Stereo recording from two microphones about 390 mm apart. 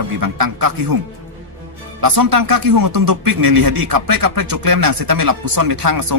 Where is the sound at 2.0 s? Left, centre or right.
Right.